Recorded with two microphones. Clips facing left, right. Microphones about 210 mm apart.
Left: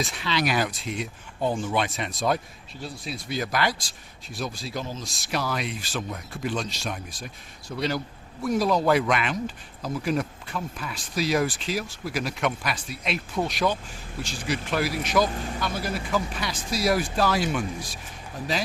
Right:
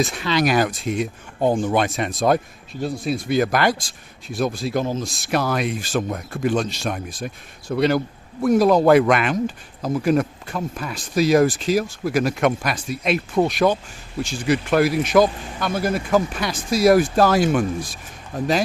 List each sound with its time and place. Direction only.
0.0 s speech: 50° right (ahead or behind)